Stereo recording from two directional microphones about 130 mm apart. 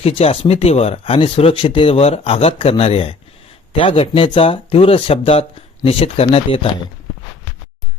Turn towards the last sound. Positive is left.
turn(degrees=50)  # may be behind; listen again after turning